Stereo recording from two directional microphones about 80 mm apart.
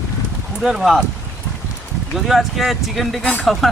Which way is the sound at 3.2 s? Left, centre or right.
Centre.